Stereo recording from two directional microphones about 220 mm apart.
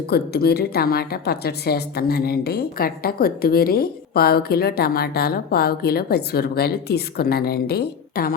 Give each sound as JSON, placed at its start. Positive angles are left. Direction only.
{"t": 0.1, "sound": "a woman's voice", "side_deg": 45}